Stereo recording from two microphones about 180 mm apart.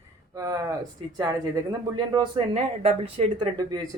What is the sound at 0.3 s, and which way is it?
Speech, 20° right (ahead or behind).